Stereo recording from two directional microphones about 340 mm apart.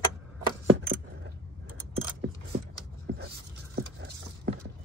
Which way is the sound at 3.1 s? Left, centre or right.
Right.